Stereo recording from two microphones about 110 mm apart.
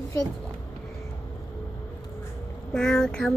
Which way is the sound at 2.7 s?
5° left (ahead or behind).